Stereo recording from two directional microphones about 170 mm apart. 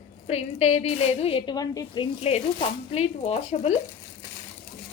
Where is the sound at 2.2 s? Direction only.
35° left (ahead or behind).